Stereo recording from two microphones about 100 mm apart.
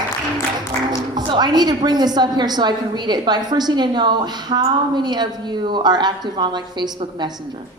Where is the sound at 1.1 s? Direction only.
45° right (ahead or behind).